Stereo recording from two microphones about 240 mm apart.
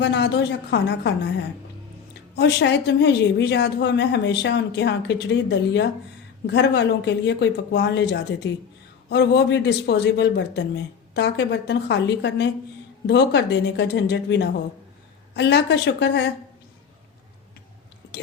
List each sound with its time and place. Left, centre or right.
0.0 s a woman's voice: left
2.3 s a woman's voice: left
18.0 s a sound: left